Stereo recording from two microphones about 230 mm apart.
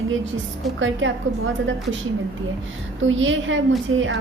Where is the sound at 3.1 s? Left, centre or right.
Right.